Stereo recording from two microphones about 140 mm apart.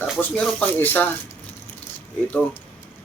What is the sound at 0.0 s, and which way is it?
Speech, 5° left (ahead or behind).